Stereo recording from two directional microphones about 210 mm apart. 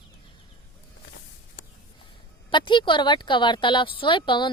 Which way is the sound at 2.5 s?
20° left (ahead or behind).